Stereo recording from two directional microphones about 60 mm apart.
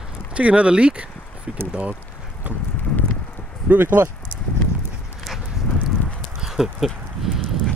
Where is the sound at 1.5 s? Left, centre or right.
Centre.